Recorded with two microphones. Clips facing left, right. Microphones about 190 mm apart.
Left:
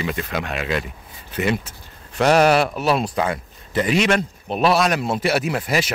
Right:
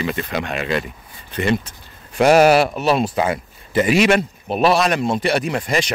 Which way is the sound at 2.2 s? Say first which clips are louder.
Right 3 dB; 10° right (ahead or behind).